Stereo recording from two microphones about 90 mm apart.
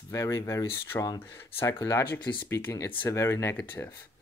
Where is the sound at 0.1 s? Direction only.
40° left (ahead or behind).